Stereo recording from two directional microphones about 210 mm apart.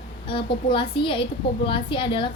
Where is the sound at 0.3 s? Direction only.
25° left (ahead or behind).